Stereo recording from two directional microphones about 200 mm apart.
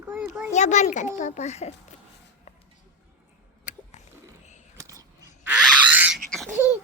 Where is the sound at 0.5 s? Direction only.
35° left (ahead or behind).